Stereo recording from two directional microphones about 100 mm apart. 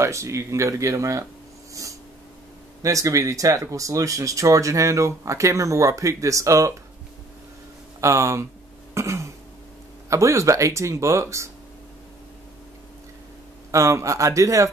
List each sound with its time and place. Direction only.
0.0 s speech: 30° right (ahead or behind)
1.7 s snort: 35° right (ahead or behind)
2.8 s speech: 35° right (ahead or behind)
8.0 s speech: 30° right (ahead or behind)
8.9 s throat clearing: 30° right (ahead or behind)
10.0 s speech: 30° right (ahead or behind)
13.7 s speech: 30° right (ahead or behind)